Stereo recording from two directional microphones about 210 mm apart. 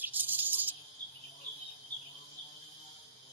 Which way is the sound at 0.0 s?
10° right (ahead or behind).